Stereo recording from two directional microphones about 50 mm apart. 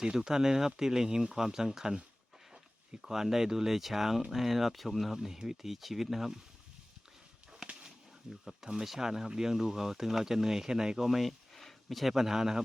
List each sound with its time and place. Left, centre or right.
0.0 s speech: centre
3.0 s speech: centre
7.7 s a sound: centre
8.3 s speech: centre